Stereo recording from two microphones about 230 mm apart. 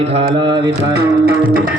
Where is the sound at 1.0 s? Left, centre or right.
Right.